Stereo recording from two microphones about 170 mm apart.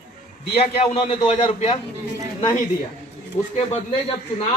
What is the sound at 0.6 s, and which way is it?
A man's voice, 35° left (ahead or behind).